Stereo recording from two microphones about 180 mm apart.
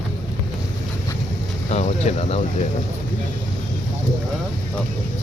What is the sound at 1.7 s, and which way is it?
Speech, 40° left (ahead or behind).